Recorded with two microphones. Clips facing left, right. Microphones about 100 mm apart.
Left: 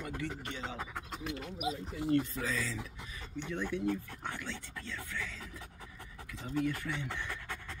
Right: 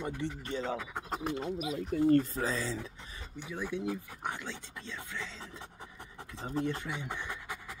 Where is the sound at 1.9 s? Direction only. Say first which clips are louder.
Right 10 dB; 55° right (ahead or behind).